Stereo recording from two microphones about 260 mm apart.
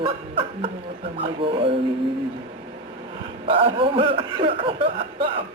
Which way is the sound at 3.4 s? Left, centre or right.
Right.